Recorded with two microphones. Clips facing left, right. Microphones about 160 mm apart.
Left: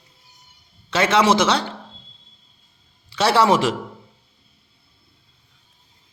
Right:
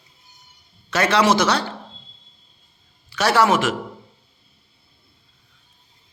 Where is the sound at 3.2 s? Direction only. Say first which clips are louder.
Left 1 dB; 25° left (ahead or behind).